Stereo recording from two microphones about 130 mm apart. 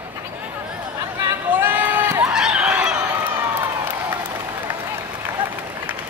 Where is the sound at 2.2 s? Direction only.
5° right (ahead or behind).